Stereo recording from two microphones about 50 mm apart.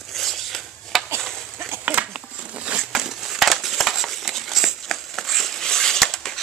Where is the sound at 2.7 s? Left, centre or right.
Centre.